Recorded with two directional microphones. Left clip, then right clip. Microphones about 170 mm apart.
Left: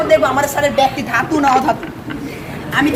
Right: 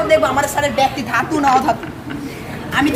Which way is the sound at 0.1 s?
10° left (ahead or behind).